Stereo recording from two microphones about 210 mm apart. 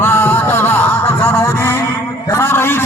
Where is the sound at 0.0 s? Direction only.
10° left (ahead or behind).